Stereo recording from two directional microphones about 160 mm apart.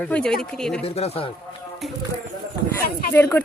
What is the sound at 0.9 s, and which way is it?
Speech, 40° left (ahead or behind).